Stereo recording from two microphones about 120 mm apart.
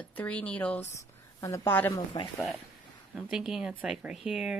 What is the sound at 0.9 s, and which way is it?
Speech, 25° left (ahead or behind).